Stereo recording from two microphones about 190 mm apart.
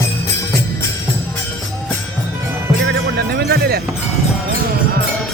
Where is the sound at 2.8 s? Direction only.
60° right (ahead or behind).